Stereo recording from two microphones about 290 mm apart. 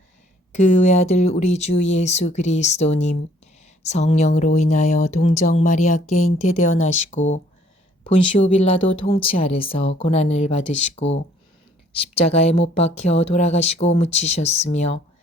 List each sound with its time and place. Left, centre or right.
0.5 s speech: left